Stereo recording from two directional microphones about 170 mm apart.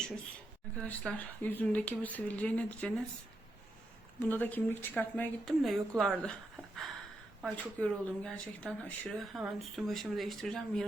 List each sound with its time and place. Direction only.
0.8 s a woman's voice: 5° left (ahead or behind)
4.3 s a woman's voice: 10° left (ahead or behind)
7.4 s speech: 5° left (ahead or behind)